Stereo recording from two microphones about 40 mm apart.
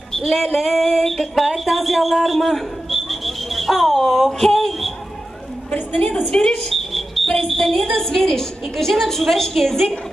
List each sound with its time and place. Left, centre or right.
0.3 s a sound: centre
1.0 s a man's voice: centre
6.3 s speech: centre
6.7 s a woman's voice: centre